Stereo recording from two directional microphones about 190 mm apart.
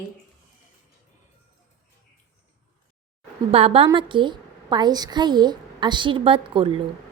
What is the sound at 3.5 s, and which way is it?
A woman's voice, 30° right (ahead or behind).